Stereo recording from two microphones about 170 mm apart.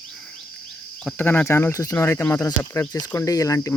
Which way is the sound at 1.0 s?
10° left (ahead or behind).